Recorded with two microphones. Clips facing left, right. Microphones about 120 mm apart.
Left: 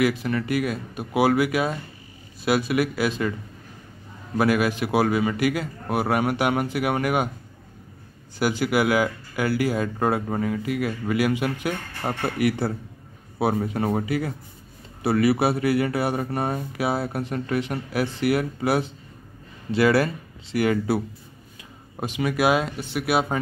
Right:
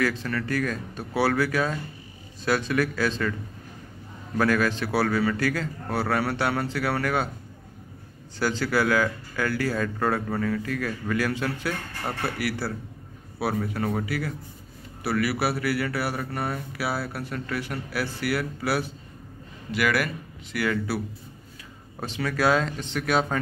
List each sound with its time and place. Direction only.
0.0 s speech: 15° left (ahead or behind)
4.4 s speech: 15° left (ahead or behind)
8.4 s speech: 15° left (ahead or behind)
22.0 s speech: 15° left (ahead or behind)